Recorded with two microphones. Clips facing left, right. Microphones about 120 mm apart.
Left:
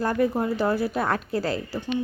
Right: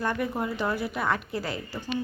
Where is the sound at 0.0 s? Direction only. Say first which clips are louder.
Left 5 dB; 35° left (ahead or behind).